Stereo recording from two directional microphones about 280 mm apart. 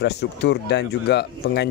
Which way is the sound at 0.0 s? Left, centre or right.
Left.